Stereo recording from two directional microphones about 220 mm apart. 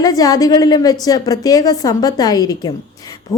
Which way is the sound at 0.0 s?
15° left (ahead or behind).